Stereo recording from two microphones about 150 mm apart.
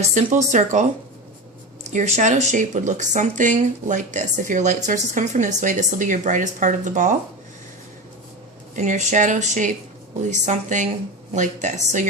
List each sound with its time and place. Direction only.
0.0 s speech: 55° right (ahead or behind)
1.9 s speech: 55° right (ahead or behind)
8.7 s speech: 55° right (ahead or behind)